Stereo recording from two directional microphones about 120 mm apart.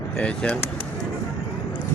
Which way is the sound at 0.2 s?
5° left (ahead or behind).